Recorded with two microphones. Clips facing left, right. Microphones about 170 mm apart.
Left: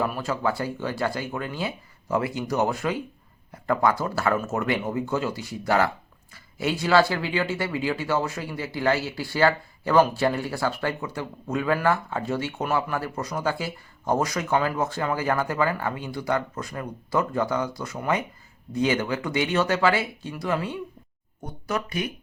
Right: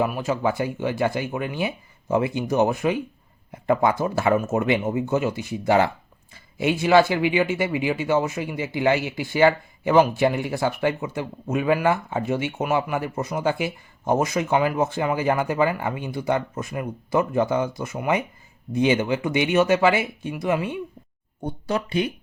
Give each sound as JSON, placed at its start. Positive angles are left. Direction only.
{"t": 0.0, "sound": "speech", "side_deg": -15}